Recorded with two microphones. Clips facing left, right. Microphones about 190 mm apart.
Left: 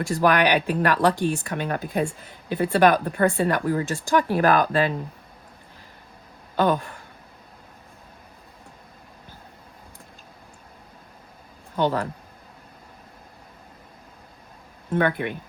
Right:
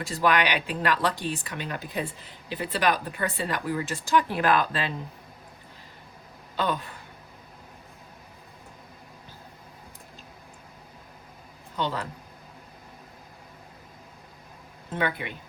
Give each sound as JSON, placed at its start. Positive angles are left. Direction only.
{"t": 0.2, "sound": "speech", "side_deg": 45}
{"t": 6.6, "sound": "speech", "side_deg": 50}
{"t": 11.8, "sound": "speech", "side_deg": 50}
{"t": 14.9, "sound": "speech", "side_deg": 55}